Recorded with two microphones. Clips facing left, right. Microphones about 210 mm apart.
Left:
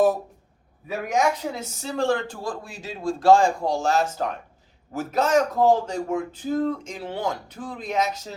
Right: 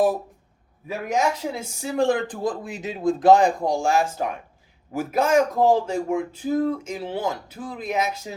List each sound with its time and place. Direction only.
0.9 s a man's voice: centre (ahead or behind)
1.5 s speech: 10° right (ahead or behind)